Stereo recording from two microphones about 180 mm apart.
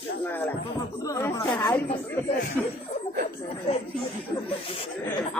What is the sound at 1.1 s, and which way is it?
Speech, 15° left (ahead or behind).